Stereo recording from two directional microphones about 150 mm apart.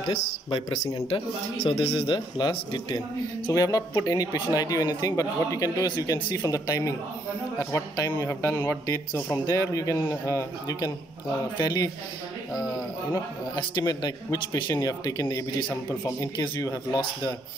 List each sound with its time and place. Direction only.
0.5 s a man's voice: 35° left (ahead or behind)
3.5 s a man's voice: 25° left (ahead or behind)
13.6 s a man's voice: 30° left (ahead or behind)